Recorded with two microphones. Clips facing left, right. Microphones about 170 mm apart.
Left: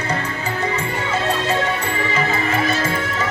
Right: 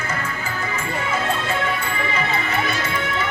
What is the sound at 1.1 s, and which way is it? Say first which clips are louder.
Music: left 3 dB; 35° left (ahead or behind).